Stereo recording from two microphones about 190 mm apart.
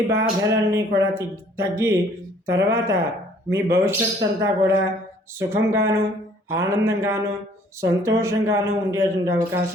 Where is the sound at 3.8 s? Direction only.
15° right (ahead or behind).